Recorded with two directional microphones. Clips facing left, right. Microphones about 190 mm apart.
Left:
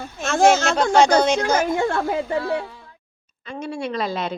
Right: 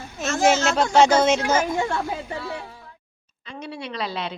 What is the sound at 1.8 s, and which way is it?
Speech, 55° left (ahead or behind).